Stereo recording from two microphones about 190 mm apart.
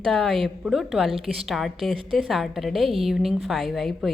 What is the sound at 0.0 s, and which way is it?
Speech, centre (ahead or behind).